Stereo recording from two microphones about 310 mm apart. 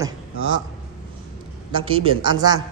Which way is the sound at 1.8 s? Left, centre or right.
Centre.